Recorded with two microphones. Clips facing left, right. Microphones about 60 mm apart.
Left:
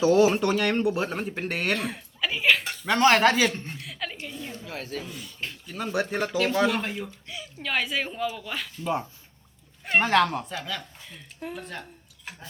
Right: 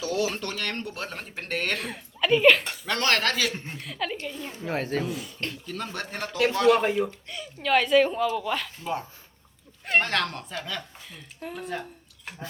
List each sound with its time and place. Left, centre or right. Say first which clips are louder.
0.0 s speech: left 8 dB; left; by 2.7 s centre
2.8 s speech: left 7 dB; centre
3.5 s a woman's voice: even; centre
3.8 s chuckle: right 4 dB; centre
4.2 s a woman's voice: right 2 dB; centre
4.6 s speech: right 10 dB; right
5.0 s a woman's voice: right 7 dB; centre
5.4 s a woman's voice: right 1 dB; centre